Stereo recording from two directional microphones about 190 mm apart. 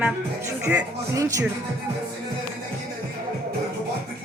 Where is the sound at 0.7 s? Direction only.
15° right (ahead or behind).